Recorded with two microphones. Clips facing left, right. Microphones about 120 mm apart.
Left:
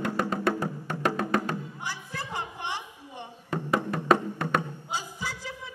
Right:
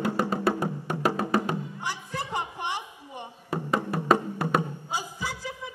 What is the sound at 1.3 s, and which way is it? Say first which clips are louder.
Music: right 2 dB; 20° right (ahead or behind).